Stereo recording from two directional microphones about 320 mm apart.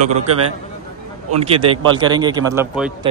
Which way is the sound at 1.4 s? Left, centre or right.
Centre.